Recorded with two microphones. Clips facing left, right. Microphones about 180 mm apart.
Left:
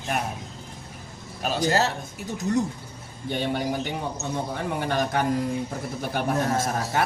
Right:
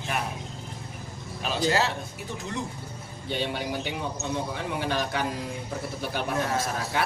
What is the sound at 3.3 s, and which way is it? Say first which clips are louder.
Speech: left 4 dB; 50° left (ahead or behind).